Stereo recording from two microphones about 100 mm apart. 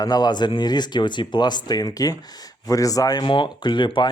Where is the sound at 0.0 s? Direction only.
40° left (ahead or behind).